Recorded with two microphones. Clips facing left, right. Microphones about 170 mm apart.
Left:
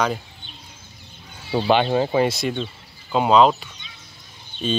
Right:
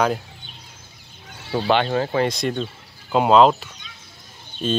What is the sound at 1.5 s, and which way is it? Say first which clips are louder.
Speech: left 1 dB; 15° left (ahead or behind).